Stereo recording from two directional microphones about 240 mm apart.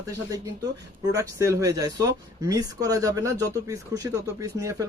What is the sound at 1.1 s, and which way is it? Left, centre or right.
Speech, centre.